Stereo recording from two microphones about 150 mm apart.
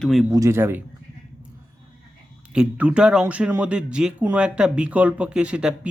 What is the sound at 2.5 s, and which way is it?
Speech, 5° right (ahead or behind).